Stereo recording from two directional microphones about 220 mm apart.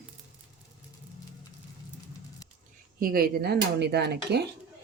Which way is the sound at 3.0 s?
40° right (ahead or behind).